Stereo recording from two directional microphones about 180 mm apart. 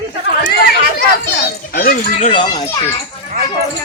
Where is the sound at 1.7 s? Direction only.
50° left (ahead or behind).